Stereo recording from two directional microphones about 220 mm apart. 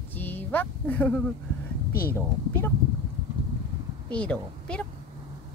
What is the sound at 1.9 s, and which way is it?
Speech, 45° left (ahead or behind).